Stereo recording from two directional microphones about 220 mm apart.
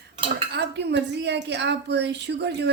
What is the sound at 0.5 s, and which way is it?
A woman's voice, 50° right (ahead or behind).